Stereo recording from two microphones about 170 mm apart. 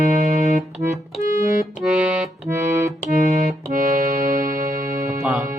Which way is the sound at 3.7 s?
55° right (ahead or behind).